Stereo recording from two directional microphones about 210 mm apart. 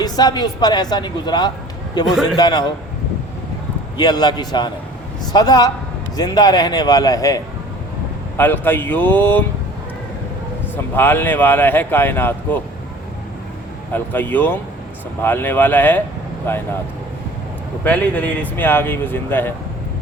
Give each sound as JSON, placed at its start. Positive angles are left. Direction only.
{"t": 0.0, "sound": "speech", "side_deg": 20}
{"t": 3.9, "sound": "speech", "side_deg": 20}
{"t": 10.9, "sound": "speech", "side_deg": 10}
{"t": 13.9, "sound": "speech", "side_deg": 10}
{"t": 17.8, "sound": "speech", "side_deg": 5}